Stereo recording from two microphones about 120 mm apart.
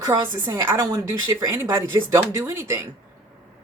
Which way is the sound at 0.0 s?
20° right (ahead or behind).